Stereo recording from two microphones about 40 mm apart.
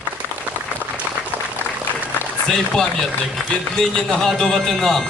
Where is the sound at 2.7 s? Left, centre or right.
Centre.